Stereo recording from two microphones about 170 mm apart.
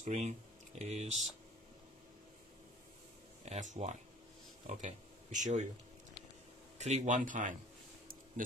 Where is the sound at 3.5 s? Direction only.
40° right (ahead or behind).